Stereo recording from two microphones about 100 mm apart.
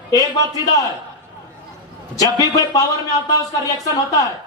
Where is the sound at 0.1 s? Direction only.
40° left (ahead or behind).